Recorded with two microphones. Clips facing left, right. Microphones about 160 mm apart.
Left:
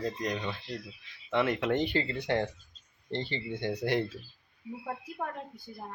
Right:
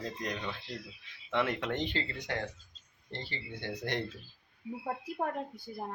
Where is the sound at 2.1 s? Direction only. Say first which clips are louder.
Left 7 dB; 30° left (ahead or behind).